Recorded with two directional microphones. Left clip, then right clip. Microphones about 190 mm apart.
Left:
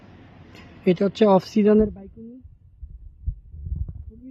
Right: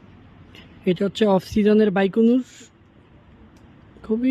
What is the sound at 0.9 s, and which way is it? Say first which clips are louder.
Speech: left 2 dB; centre (ahead or behind).